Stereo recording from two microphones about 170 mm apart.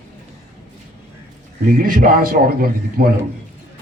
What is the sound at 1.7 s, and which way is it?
A man's voice, 50° right (ahead or behind).